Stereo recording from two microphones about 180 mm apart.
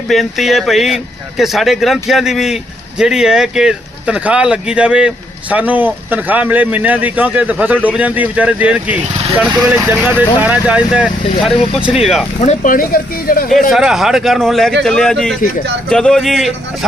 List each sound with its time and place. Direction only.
0.1 s speech: centre (ahead or behind)
12.4 s speech: 45° left (ahead or behind)
13.7 s speech: centre (ahead or behind)